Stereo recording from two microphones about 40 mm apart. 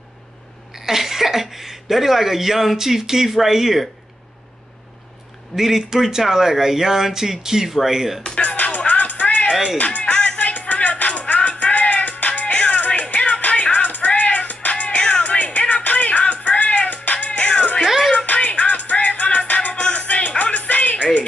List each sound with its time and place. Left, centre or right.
0.7 s speech: centre
5.6 s speech: centre
8.4 s music: left
17.3 s music: left
17.8 s music: centre
18.2 s music: left